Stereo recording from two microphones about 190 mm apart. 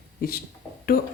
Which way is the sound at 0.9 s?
55° left (ahead or behind).